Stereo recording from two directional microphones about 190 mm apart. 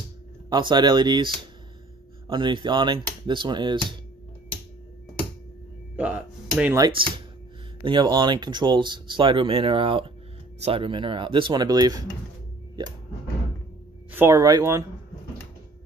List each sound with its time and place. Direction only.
0.5 s speech: 25° right (ahead or behind)
5.9 s a sound: 5° right (ahead or behind)
7.8 s speech: 25° right (ahead or behind)
14.1 s speech: 15° right (ahead or behind)